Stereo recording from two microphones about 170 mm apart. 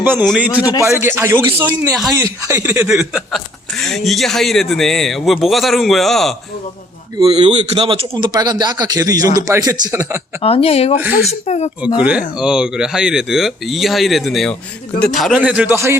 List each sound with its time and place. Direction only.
0.0 s a man's voice: 10° right (ahead or behind)
0.6 s a man's voice: 20° left (ahead or behind)
0.9 s a man's voice: 15° right (ahead or behind)
2.8 s speech: 5° right (ahead or behind)
7.2 s speech: 30° right (ahead or behind)
8.1 s a man's voice: 20° right (ahead or behind)
10.4 s speech: 35° left (ahead or behind)
11.9 s a man's voice: 5° right (ahead or behind)